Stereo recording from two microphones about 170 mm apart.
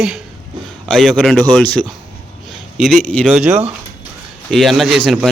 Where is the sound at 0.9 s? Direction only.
Centre (ahead or behind).